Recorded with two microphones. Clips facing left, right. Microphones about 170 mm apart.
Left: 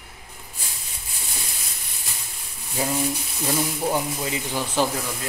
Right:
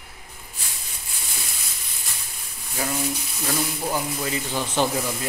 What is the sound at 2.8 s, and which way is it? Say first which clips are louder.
Speech: left 2 dB; 25° left (ahead or behind).